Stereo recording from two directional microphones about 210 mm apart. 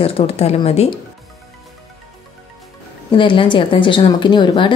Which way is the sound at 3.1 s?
25° left (ahead or behind).